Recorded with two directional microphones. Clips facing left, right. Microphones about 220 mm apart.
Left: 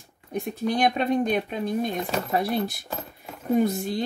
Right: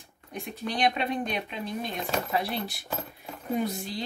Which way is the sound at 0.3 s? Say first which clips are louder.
Left 7 dB; 45° left (ahead or behind).